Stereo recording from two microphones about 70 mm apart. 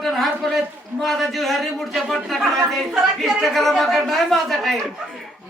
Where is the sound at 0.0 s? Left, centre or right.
Centre.